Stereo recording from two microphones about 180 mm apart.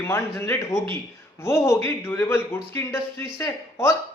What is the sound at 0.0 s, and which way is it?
Speech, 15° left (ahead or behind).